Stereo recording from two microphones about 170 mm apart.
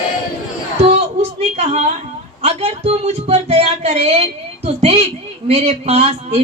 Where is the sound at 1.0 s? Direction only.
40° right (ahead or behind).